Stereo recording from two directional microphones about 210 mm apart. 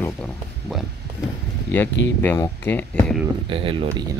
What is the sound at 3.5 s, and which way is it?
Speech, 25° right (ahead or behind).